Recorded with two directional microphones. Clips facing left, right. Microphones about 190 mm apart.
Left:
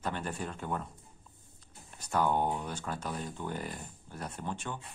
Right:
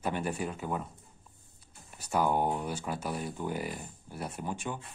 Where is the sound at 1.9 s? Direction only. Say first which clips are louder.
Right 1 dB; 10° right (ahead or behind).